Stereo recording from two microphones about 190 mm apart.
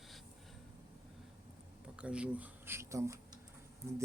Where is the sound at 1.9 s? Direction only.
5° right (ahead or behind).